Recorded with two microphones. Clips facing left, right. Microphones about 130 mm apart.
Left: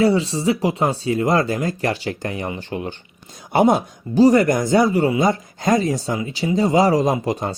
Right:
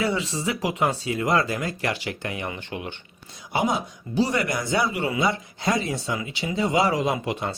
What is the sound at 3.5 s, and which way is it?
Speech, 55° left (ahead or behind).